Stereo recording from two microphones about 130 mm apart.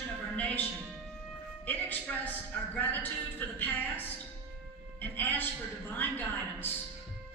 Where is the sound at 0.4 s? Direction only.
10° left (ahead or behind).